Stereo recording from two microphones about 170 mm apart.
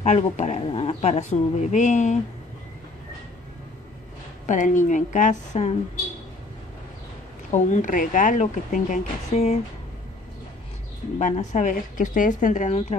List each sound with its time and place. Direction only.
0.0 s speech: 45° left (ahead or behind)
4.5 s speech: 45° left (ahead or behind)
7.5 s speech: 45° left (ahead or behind)
11.1 s speech: 45° left (ahead or behind)